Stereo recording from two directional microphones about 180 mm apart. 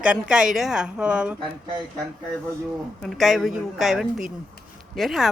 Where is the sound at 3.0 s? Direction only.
Centre (ahead or behind).